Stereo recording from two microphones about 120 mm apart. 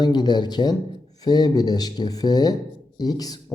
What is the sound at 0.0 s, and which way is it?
Speech, 35° left (ahead or behind).